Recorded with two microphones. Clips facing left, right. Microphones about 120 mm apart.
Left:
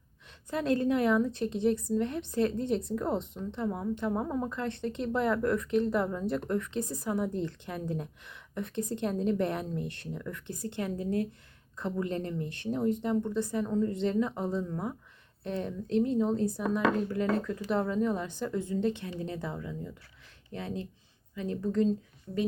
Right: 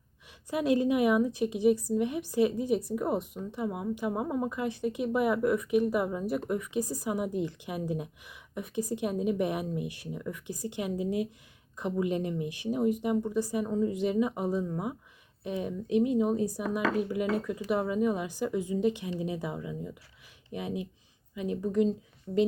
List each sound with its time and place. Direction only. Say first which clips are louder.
0.3 s a woman's voice: right 2 dB; 10° right (ahead or behind)